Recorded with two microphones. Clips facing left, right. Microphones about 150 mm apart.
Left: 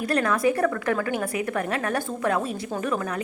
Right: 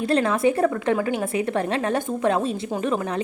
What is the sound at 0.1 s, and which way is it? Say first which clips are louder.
A woman's voice: right 2 dB; 25° right (ahead or behind).